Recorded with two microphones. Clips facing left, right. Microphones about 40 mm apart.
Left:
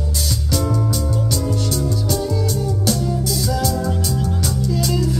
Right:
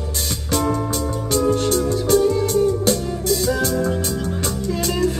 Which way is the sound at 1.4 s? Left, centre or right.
Right.